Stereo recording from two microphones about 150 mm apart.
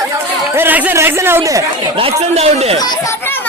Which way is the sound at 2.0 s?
40° right (ahead or behind).